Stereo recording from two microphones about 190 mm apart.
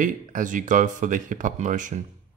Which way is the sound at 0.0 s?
45° right (ahead or behind).